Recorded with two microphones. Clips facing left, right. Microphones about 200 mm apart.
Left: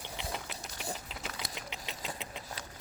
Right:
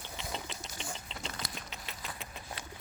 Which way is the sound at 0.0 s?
15° left (ahead or behind).